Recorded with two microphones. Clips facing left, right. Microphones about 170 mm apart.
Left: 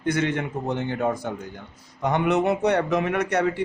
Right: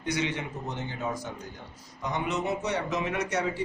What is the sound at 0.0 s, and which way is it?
A man's voice, 50° left (ahead or behind).